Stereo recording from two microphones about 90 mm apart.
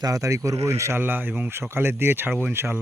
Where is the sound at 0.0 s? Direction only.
40° right (ahead or behind).